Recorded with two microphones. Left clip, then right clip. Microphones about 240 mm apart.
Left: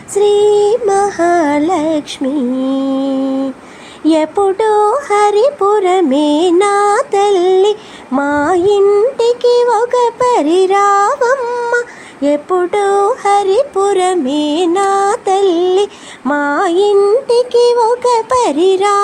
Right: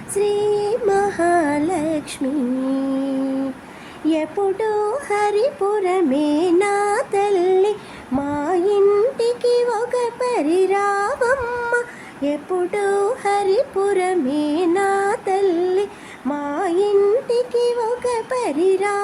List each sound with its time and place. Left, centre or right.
0.2 s music: centre
4.1 s speech: centre
12.7 s music: centre